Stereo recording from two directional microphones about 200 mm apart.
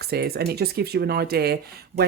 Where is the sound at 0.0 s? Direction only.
50° right (ahead or behind).